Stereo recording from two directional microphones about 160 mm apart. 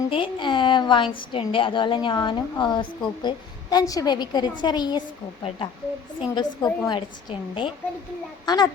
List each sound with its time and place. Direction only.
0.1 s a woman's voice: 30° left (ahead or behind)
6.1 s a woman's voice: 25° left (ahead or behind)